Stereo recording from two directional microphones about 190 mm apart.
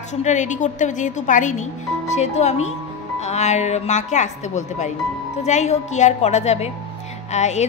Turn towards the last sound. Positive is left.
turn(degrees=35)  # may be behind; listen again after turning